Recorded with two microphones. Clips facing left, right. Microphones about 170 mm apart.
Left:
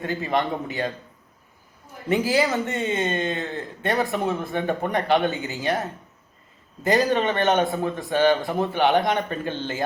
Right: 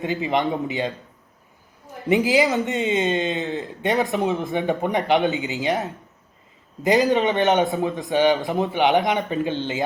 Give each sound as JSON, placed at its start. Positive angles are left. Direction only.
{"t": 0.0, "sound": "a man's voice", "side_deg": -20}
{"t": 2.0, "sound": "a man's voice", "side_deg": -20}
{"t": 6.8, "sound": "a man's voice", "side_deg": -15}